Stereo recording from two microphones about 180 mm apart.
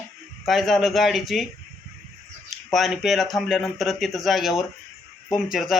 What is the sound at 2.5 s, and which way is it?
Speech, centre (ahead or behind).